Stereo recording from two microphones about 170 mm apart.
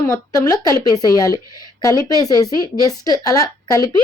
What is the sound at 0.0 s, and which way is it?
Speech, 15° left (ahead or behind).